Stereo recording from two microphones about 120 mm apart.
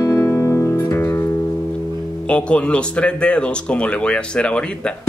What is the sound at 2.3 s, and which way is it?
Speech, 10° left (ahead or behind).